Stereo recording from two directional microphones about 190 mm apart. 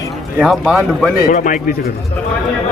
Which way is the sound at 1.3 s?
45° left (ahead or behind).